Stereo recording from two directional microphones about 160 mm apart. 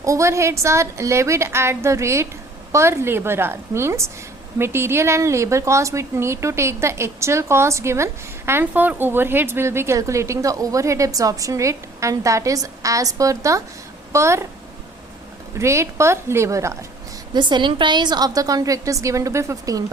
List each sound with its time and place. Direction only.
0.0 s a woman's voice: 20° right (ahead or behind)
15.5 s a woman's voice: 15° right (ahead or behind)
17.3 s a woman's voice: 30° right (ahead or behind)